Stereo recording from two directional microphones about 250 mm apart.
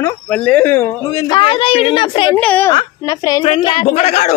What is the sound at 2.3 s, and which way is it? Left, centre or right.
Speech, centre.